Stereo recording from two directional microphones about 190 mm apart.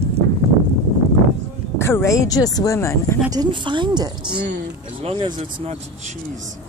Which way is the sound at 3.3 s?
20° right (ahead or behind).